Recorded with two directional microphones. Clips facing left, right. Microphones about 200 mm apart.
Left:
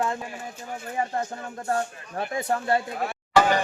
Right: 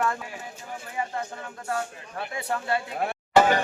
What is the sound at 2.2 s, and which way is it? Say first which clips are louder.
Speech: left 4 dB; 40° left (ahead or behind).